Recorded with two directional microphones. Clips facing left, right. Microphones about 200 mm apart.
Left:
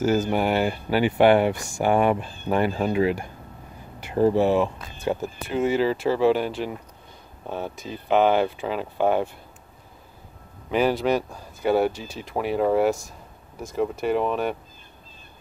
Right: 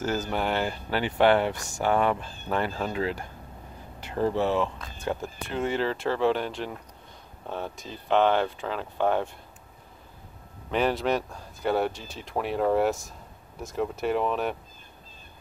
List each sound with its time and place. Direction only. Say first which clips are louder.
0.3 s speech: left 5 dB; 10° left (ahead or behind)
10.7 s speech: left 4 dB; 5° left (ahead or behind)